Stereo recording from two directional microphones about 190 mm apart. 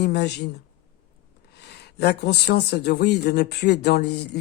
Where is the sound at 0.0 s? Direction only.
60° left (ahead or behind).